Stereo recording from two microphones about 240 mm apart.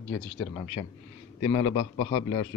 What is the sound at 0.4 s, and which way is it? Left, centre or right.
A man's voice, centre.